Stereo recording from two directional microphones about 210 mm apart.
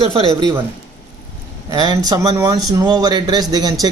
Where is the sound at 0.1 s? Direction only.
25° right (ahead or behind).